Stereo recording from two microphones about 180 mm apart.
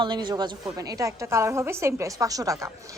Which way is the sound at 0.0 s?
25° right (ahead or behind).